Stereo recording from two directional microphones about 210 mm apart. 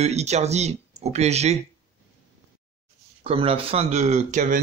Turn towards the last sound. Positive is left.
turn(degrees=-35)  # may be behind; listen again after turning